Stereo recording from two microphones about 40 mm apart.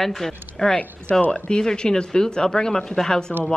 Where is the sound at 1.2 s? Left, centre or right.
Left.